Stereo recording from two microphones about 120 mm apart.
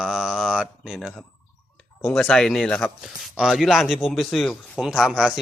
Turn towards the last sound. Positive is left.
turn(degrees=5)  # may be behind; listen again after turning